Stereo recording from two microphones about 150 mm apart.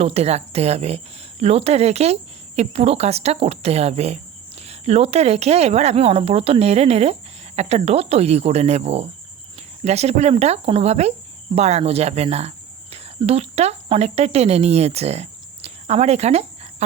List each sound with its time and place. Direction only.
0.0 s speech: 45° right (ahead or behind)